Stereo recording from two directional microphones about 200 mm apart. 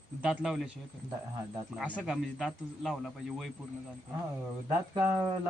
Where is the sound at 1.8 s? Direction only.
5° right (ahead or behind).